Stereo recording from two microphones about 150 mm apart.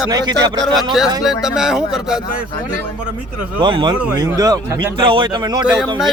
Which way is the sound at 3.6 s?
30° right (ahead or behind).